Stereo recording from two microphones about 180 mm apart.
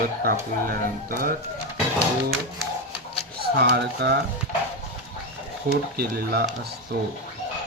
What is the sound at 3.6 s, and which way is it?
Speech, 70° right (ahead or behind).